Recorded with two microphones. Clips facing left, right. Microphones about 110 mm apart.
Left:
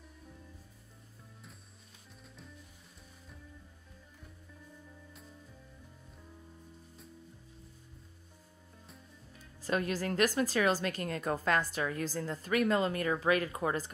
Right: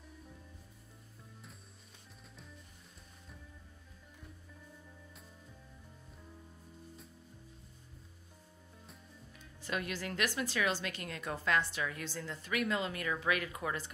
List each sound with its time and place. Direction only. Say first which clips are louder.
0.1 s music: right 3 dB; centre (ahead or behind)
2.3 s music: left 2 dB; centre (ahead or behind)
8.8 s music: left 1 dB; centre (ahead or behind)
9.6 s a woman's voice: left 6 dB; 40° left (ahead or behind)